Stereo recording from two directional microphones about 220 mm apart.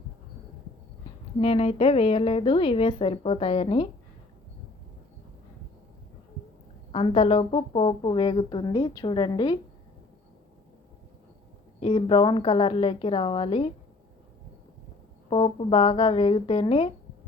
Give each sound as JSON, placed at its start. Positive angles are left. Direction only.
{"t": 1.4, "sound": "a woman's voice", "side_deg": 25}
{"t": 6.9, "sound": "a woman's voice", "side_deg": 25}
{"t": 11.8, "sound": "a woman's voice", "side_deg": 25}
{"t": 15.3, "sound": "a woman's voice", "side_deg": 25}